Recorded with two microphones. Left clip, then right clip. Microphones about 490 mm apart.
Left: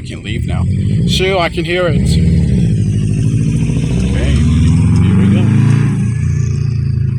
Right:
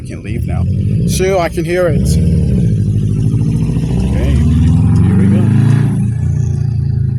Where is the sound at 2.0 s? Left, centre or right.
Right.